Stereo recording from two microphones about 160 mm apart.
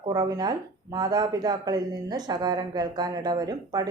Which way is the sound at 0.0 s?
20° right (ahead or behind).